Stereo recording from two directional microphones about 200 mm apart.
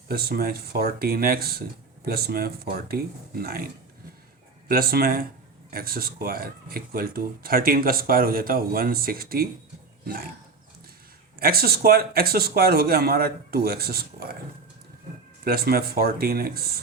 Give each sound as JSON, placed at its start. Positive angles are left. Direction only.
{"t": 0.1, "sound": "speech", "side_deg": -50}
{"t": 4.7, "sound": "speech", "side_deg": -50}
{"t": 11.3, "sound": "speech", "side_deg": -50}
{"t": 15.4, "sound": "speech", "side_deg": -50}